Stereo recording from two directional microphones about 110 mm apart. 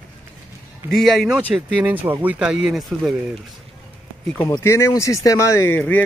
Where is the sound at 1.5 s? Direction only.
15° right (ahead or behind).